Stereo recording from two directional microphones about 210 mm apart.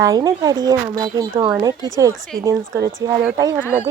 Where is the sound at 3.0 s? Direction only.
15° right (ahead or behind).